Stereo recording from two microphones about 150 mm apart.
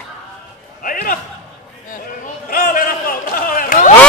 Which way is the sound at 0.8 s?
70° left (ahead or behind).